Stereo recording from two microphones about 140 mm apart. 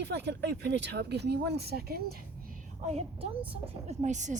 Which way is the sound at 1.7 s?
90° right.